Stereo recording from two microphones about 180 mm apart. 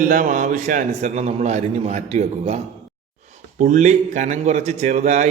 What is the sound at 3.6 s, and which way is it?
A man's voice, 40° right (ahead or behind).